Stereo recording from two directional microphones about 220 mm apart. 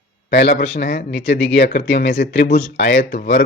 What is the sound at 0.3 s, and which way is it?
Speech, 50° left (ahead or behind).